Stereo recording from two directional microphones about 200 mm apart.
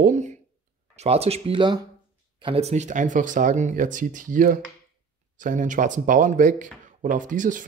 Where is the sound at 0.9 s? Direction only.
30° right (ahead or behind).